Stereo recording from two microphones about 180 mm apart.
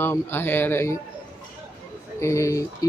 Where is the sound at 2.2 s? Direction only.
15° left (ahead or behind).